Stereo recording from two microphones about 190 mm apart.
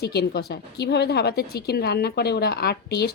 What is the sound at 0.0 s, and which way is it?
A woman's voice, 60° left (ahead or behind).